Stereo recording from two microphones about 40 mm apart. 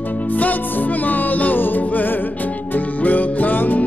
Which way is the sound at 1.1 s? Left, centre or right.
Left.